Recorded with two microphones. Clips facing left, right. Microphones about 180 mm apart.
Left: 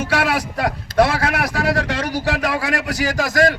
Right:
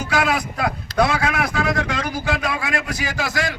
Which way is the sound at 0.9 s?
50° left (ahead or behind).